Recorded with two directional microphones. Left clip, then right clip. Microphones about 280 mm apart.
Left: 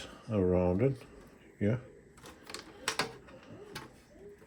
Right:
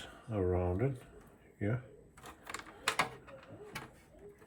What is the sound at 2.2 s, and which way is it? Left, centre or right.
Typewriter, centre.